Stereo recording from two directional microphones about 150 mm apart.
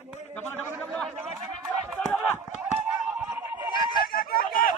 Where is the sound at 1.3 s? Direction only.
20° right (ahead or behind).